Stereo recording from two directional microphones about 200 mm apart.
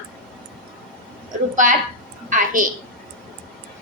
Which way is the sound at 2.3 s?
40° right (ahead or behind).